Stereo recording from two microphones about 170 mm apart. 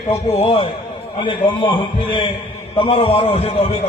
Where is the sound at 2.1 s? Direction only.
30° left (ahead or behind).